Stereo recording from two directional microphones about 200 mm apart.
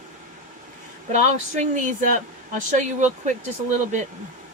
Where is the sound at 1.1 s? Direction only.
40° right (ahead or behind).